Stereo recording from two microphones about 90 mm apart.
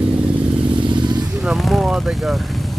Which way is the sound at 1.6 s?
10° right (ahead or behind).